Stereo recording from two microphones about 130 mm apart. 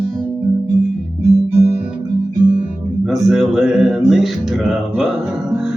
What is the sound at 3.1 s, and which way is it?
Music, centre (ahead or behind).